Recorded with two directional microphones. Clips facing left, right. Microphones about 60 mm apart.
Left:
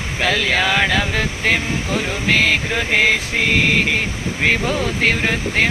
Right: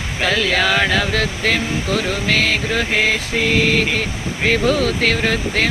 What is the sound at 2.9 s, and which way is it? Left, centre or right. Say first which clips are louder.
Mantra: left 5 dB; left.